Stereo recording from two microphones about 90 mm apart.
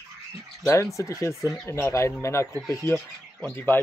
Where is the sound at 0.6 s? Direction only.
35° left (ahead or behind).